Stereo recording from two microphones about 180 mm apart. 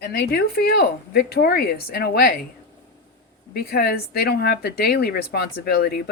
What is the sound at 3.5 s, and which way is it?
Speech, 60° left (ahead or behind).